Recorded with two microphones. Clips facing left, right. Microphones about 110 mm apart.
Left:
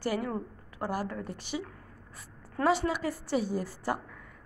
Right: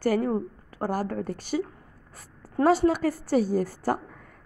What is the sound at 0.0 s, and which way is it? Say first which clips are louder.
A woman's voice: right 7 dB; 45° right (ahead or behind).